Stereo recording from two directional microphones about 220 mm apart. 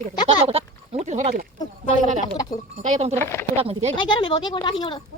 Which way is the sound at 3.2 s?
10° left (ahead or behind).